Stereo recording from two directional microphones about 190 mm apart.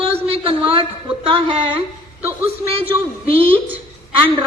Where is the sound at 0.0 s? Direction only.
30° right (ahead or behind).